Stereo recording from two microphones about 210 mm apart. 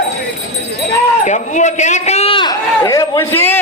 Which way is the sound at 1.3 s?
35° left (ahead or behind).